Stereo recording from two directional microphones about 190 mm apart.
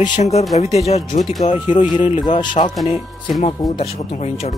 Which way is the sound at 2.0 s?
30° left (ahead or behind).